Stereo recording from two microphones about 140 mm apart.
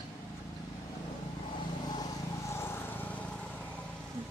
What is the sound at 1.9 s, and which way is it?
Vehicle, 30° left (ahead or behind).